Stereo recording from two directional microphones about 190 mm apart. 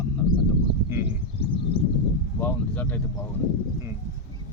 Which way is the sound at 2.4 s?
10° left (ahead or behind).